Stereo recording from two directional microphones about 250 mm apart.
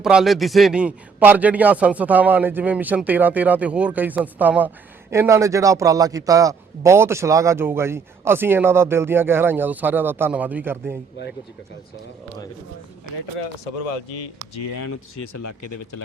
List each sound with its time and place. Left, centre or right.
0.0 s a man's voice: centre